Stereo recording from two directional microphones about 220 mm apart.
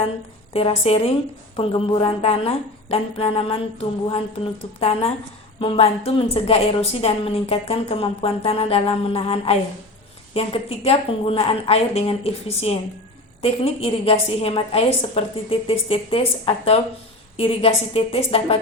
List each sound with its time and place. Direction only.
0.5 s a woman's voice: 25° left (ahead or behind)